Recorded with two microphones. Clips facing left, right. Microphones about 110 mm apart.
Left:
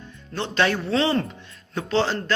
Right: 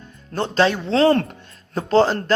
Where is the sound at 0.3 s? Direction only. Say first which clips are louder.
Right 5 dB; 45° right (ahead or behind).